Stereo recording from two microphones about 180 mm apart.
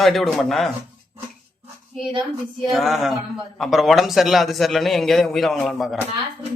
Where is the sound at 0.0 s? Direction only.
Centre (ahead or behind).